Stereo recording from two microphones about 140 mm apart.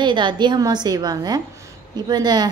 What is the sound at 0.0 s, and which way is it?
A woman's voice, 35° right (ahead or behind).